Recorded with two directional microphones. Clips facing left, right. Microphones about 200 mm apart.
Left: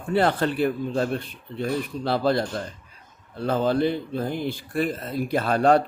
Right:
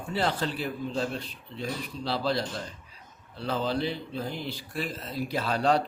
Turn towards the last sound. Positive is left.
turn(degrees=55)  # may be behind; listen again after turning